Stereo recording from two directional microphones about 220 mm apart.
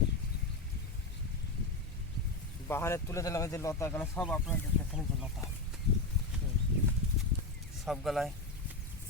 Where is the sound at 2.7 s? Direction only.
10° left (ahead or behind).